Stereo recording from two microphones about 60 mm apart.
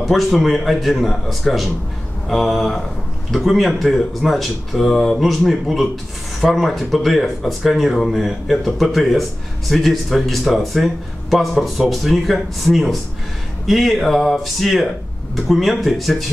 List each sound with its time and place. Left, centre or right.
0.0 s speech: centre